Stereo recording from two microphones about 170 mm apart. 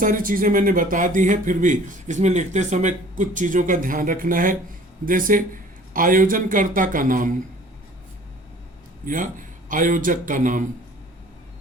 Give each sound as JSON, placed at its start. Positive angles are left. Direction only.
{"t": 0.0, "sound": "speech", "side_deg": -55}
{"t": 9.0, "sound": "speech", "side_deg": -50}